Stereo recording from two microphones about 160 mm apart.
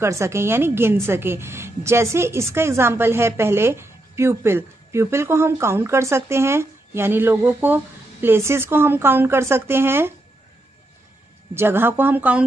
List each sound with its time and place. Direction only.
0.0 s a woman's voice: 15° right (ahead or behind)
11.5 s a woman's voice: 15° right (ahead or behind)